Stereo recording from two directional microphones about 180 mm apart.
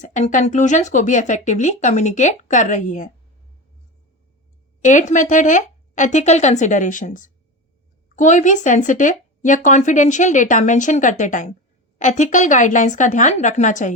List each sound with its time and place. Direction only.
0.0 s speech: 45° left (ahead or behind)
4.8 s speech: 45° left (ahead or behind)